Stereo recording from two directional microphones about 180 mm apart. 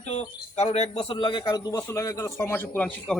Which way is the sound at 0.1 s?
35° left (ahead or behind).